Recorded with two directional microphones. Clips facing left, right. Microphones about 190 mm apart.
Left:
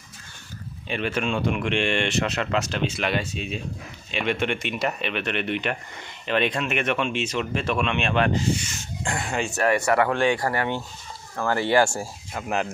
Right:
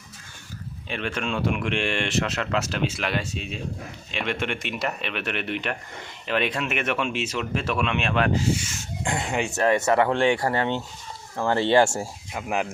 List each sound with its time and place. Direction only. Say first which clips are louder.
0.9 s speech: left 3 dB; 5° left (ahead or behind)
9.0 s speech: right 1 dB; 20° right (ahead or behind)
12.3 s speech: left 1 dB; 10° right (ahead or behind)